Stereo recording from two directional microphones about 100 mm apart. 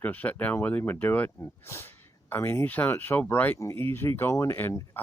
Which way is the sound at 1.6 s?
25° left (ahead or behind).